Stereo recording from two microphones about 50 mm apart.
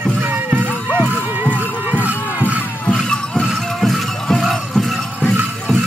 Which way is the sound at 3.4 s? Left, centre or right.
Centre.